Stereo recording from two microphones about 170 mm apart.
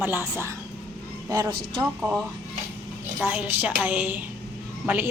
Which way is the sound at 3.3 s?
10° right (ahead or behind).